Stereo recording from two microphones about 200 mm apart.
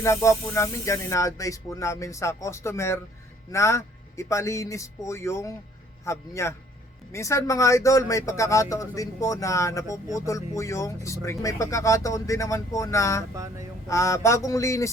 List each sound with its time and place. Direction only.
0.0 s speech: 15° left (ahead or behind)
13.3 s mantra: 15° right (ahead or behind)
13.8 s speech: 15° left (ahead or behind)